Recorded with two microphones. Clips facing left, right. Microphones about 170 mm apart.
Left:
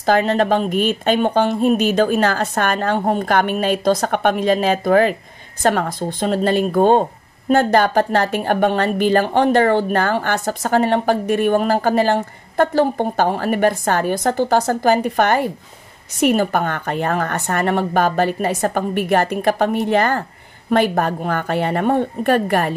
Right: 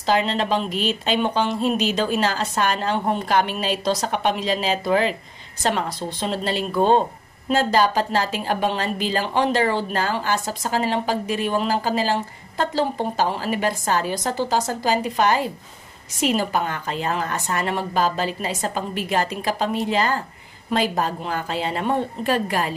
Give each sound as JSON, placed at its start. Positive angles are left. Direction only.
{"t": 0.0, "sound": "speech", "side_deg": 50}